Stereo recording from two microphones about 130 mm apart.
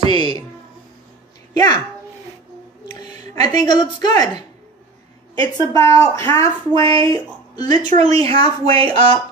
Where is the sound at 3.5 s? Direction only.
35° left (ahead or behind).